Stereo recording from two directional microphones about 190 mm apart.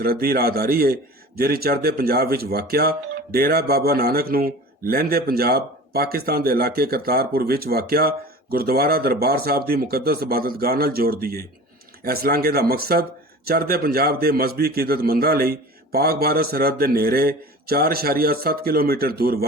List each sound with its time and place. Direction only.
0.0 s speech: 55° right (ahead or behind)